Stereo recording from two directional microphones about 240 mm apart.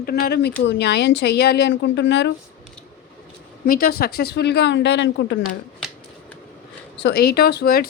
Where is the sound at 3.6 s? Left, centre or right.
Left.